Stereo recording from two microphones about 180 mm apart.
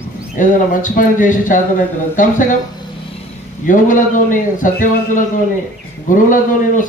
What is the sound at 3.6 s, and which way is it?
A man's voice, 45° left (ahead or behind).